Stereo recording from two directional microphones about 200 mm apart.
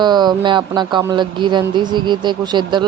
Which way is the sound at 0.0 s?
20° right (ahead or behind).